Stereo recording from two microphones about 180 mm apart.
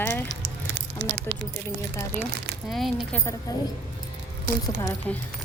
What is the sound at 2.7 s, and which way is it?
Speech, centre (ahead or behind).